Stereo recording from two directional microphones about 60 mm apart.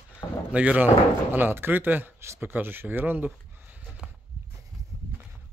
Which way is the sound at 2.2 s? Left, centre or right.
Right.